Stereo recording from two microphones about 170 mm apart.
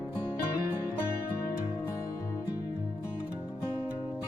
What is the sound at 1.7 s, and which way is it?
Music, 15° left (ahead or behind).